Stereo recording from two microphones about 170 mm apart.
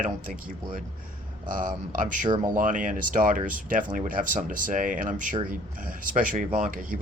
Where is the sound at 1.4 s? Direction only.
50° right (ahead or behind).